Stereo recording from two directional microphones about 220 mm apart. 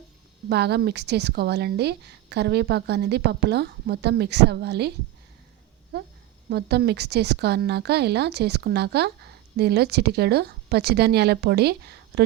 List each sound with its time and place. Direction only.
0.4 s a woman's voice: 50° right (ahead or behind)